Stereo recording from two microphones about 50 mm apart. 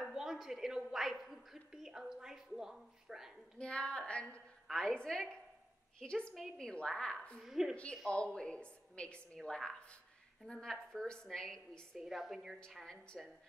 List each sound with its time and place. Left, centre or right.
0.1 s a sound: centre
3.5 s a woman's voice: left; by 6.5 s centre
6.6 s a woman's voice: centre
7.3 s a woman's voice: centre
7.7 s a woman's voice: left
12.0 s a woman's voice: centre
12.8 s a woman's voice: centre